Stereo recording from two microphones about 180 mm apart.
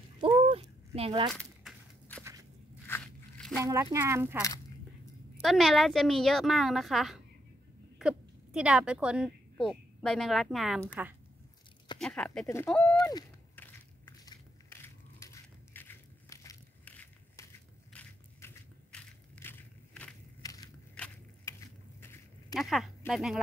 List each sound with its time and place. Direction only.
0.2 s a sound: 30° right (ahead or behind)
1.3 s a sound: centre (ahead or behind)
2.9 s crunch: 5° left (ahead or behind)
3.5 s speech: 15° right (ahead or behind)
5.4 s a woman's voice: centre (ahead or behind)
12.0 s a woman's voice: 5° left (ahead or behind)
12.9 s speech: 20° left (ahead or behind)
13.6 s biting: 10° left (ahead or behind)
14.2 s crushing: 15° left (ahead or behind)
20.4 s a sound: 20° left (ahead or behind)
20.9 s a sound: 5° left (ahead or behind)
22.5 s speech: centre (ahead or behind)